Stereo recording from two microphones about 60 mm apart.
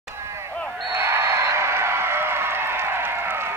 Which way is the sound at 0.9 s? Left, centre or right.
Right.